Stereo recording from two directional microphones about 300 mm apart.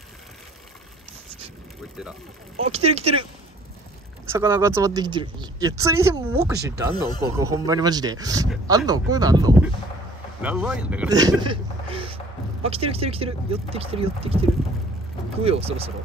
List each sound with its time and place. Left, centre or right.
2.6 s speech: right
4.3 s speech: centre